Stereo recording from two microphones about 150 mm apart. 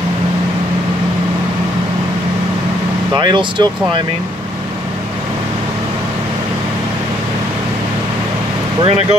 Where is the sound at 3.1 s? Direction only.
30° right (ahead or behind).